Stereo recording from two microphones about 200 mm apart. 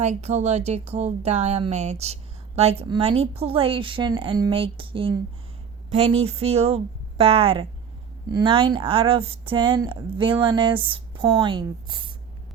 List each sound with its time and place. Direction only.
0.0 s speech: 35° right (ahead or behind)